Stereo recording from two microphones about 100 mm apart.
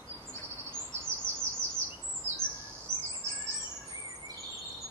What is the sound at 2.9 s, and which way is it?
Bird vocalization, 45° left (ahead or behind).